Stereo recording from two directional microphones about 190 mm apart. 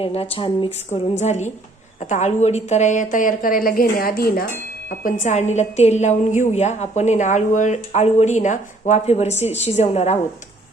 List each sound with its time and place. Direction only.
0.0 s a woman's voice: 30° left (ahead or behind)